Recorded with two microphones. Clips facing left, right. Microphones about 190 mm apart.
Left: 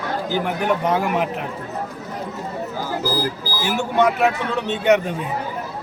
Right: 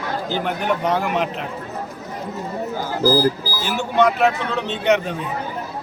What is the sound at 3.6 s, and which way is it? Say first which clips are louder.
Speech: even; 10° left (ahead or behind).